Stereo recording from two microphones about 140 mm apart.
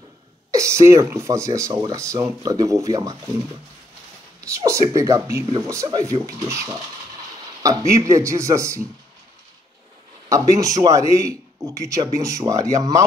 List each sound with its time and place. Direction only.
0.5 s speech: 20° right (ahead or behind)
4.4 s speech: 20° right (ahead or behind)
7.8 s speech: 20° right (ahead or behind)
10.3 s speech: 25° right (ahead or behind)